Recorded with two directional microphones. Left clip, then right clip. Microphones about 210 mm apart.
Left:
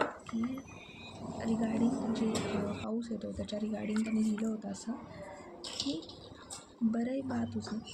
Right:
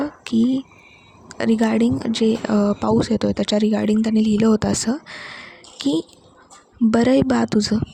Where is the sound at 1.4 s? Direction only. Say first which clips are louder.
Right 15 dB; 50° right (ahead or behind).